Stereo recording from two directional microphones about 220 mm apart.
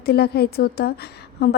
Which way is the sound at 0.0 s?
45° left (ahead or behind).